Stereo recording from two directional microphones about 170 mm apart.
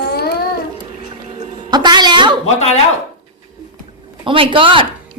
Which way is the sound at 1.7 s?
25° right (ahead or behind).